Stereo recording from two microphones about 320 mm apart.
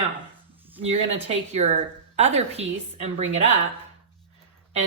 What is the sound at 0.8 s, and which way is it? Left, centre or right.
Speech, centre.